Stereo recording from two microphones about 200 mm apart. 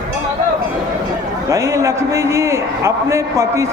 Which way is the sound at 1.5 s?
15° right (ahead or behind).